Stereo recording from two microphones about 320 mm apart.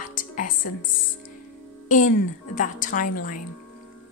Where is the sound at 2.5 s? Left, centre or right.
Left.